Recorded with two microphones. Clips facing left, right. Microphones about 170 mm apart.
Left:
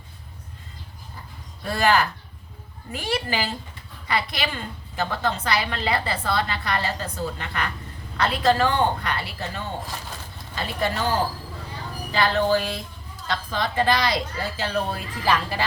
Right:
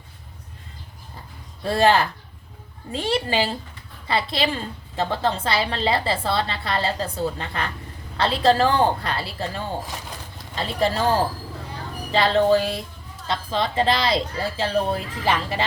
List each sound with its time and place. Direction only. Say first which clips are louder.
1.6 s a woman's voice: right 3 dB; 25° right (ahead or behind)